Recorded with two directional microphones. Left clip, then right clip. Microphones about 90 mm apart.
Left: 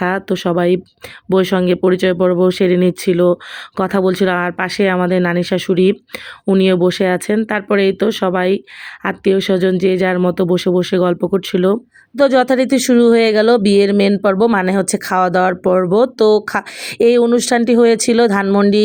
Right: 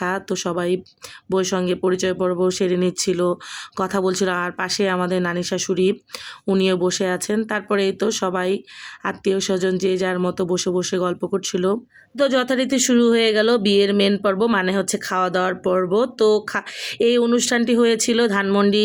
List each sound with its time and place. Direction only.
0.0 s speech: 30° left (ahead or behind)
12.1 s speech: 50° left (ahead or behind)